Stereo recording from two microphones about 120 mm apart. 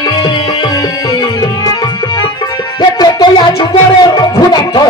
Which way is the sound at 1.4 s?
35° left (ahead or behind).